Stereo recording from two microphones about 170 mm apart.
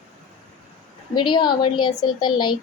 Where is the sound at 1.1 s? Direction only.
25° left (ahead or behind).